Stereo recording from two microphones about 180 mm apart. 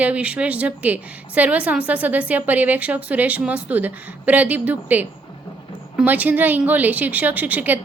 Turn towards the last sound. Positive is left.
turn(degrees=-10)  # may be behind; listen again after turning